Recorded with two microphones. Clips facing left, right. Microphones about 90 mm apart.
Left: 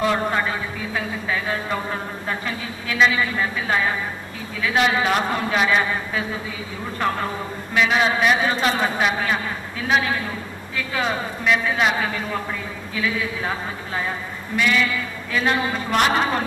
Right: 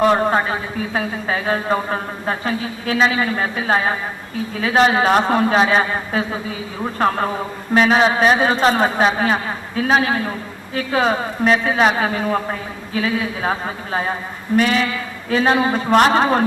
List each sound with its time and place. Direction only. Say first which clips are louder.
0.0 s a man's voice: right 6 dB; 35° right (ahead or behind)
7.7 s a man's voice: right 5 dB; 35° right (ahead or behind)